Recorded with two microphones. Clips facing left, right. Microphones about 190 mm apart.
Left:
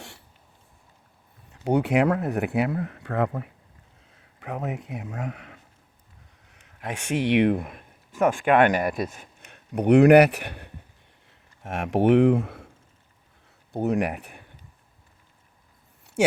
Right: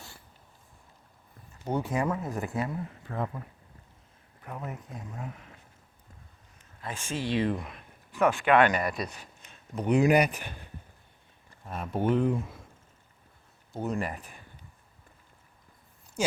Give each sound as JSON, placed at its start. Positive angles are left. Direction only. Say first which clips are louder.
{"t": 1.6, "sound": "speech", "louder": "left 8 dB", "side_deg": 75}
{"t": 4.1, "sound": "speech", "louder": "left 8 dB", "side_deg": 90}
{"t": 9.7, "sound": "speech", "louder": "left 9 dB", "side_deg": 70}
{"t": 11.3, "sound": "speech", "louder": "left 7 dB", "side_deg": 85}
{"t": 13.8, "sound": "speech", "louder": "left 7 dB", "side_deg": 70}
{"t": 16.2, "sound": "speech", "louder": "left 8 dB", "side_deg": 70}